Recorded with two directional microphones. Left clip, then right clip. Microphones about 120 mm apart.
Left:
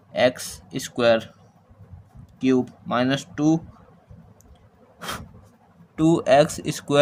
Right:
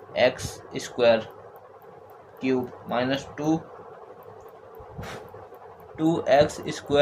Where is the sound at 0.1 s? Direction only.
90° left.